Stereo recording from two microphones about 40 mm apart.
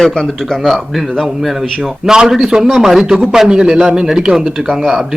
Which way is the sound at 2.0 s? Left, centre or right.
Centre.